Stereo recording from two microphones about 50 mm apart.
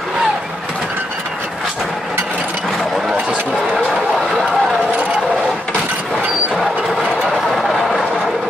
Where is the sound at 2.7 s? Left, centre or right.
Centre.